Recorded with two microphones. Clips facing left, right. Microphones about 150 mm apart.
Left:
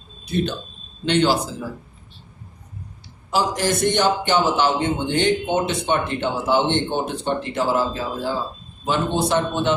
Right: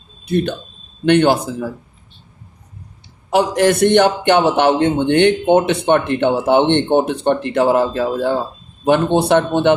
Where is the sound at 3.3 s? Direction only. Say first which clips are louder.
Right 7 dB; 60° right (ahead or behind).